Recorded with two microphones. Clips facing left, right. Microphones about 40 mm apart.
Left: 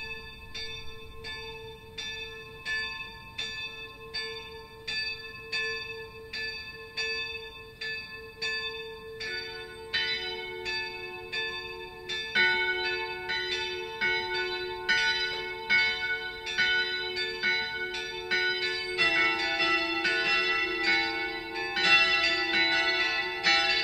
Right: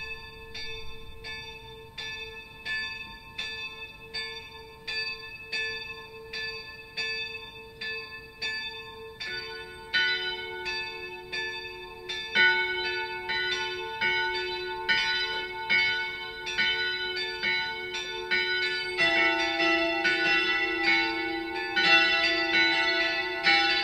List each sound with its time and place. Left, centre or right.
2.6 s church bell: centre
7.0 s church bell: centre
14.0 s church bell: centre
14.3 s church bell: centre
17.7 s change ringing: centre